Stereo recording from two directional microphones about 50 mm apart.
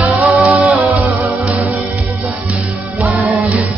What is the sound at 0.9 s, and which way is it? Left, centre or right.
Music, right.